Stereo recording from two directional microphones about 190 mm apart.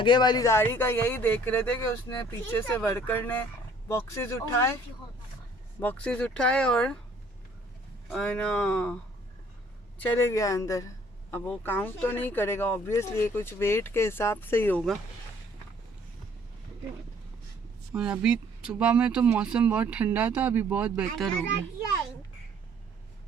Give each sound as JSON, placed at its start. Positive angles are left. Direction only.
{"t": 0.0, "sound": "speech", "side_deg": 25}
{"t": 5.8, "sound": "speech", "side_deg": 10}
{"t": 8.1, "sound": "speech", "side_deg": 5}
{"t": 10.0, "sound": "speech", "side_deg": 10}
{"t": 17.9, "sound": "speech", "side_deg": -5}